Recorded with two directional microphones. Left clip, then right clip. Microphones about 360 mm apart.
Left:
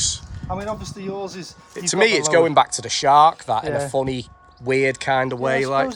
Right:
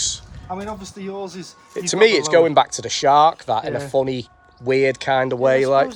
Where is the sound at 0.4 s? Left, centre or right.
Left.